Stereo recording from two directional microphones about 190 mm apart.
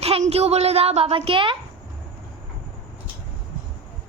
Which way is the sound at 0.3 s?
30° right (ahead or behind).